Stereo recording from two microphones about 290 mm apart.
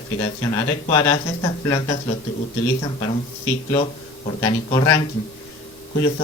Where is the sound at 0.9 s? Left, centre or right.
Centre.